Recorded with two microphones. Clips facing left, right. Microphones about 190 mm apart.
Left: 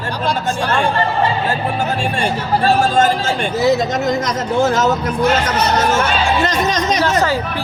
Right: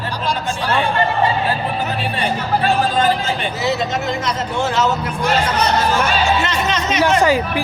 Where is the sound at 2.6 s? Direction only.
45° left (ahead or behind).